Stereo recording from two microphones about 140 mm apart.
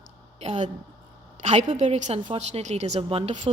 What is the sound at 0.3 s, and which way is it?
A woman's voice, 50° right (ahead or behind).